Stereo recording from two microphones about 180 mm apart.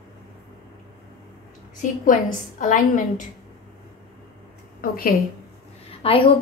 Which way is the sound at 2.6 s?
45° left (ahead or behind).